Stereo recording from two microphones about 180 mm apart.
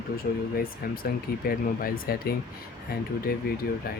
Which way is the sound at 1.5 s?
55° left (ahead or behind).